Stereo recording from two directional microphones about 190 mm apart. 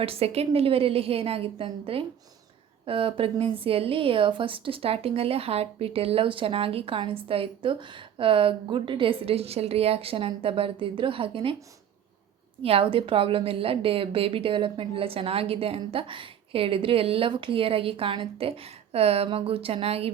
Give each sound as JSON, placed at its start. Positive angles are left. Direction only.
{"t": 0.0, "sound": "a woman's voice", "side_deg": -30}
{"t": 12.6, "sound": "a woman's voice", "side_deg": -30}